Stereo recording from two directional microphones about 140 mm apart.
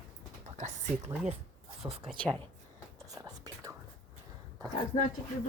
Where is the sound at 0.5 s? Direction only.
55° right (ahead or behind).